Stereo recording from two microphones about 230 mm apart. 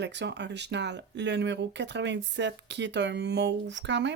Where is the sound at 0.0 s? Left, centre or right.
Right.